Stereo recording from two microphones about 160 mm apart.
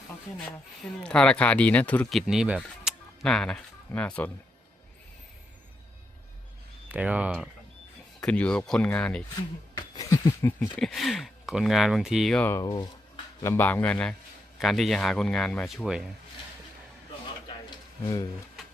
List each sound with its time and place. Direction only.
1.0 s speech: 5° left (ahead or behind)
6.8 s speech: 10° right (ahead or behind)
8.2 s speech: 5° left (ahead or behind)
9.7 s a sound: 25° left (ahead or behind)
10.8 s speech: centre (ahead or behind)
12.5 s speech: 20° left (ahead or behind); by 16.0 s 5° right (ahead or behind)
17.7 s a sound: 25° left (ahead or behind)